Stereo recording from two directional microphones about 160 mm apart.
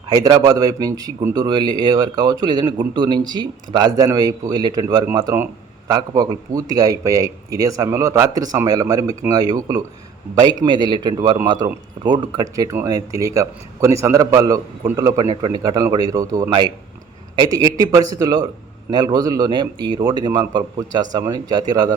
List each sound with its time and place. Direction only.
0.1 s speech: 25° right (ahead or behind)